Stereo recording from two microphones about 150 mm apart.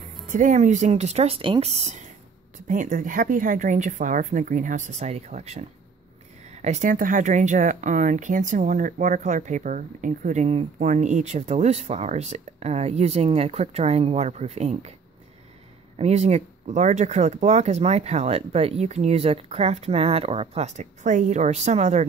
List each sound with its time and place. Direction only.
0.3 s speech: 60° right (ahead or behind)
2.5 s speech: 60° right (ahead or behind)
16.0 s speech: 45° right (ahead or behind)